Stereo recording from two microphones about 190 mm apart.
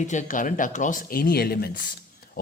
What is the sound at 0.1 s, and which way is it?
Speech, 40° left (ahead or behind).